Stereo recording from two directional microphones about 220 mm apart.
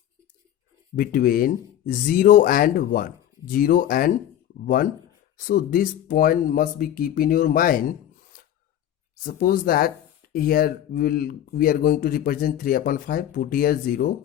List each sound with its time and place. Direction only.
0.9 s speech: 40° left (ahead or behind)